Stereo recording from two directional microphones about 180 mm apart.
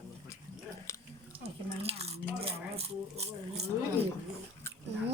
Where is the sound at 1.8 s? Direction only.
35° right (ahead or behind).